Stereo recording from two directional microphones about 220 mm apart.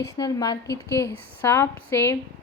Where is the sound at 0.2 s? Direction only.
20° left (ahead or behind).